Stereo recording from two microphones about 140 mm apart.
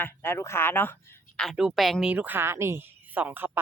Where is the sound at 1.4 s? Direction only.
Centre (ahead or behind).